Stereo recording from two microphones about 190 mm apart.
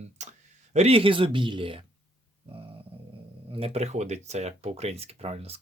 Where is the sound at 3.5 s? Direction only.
30° right (ahead or behind).